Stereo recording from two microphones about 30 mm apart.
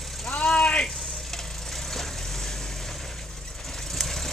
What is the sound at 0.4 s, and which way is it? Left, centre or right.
Vehicle, left.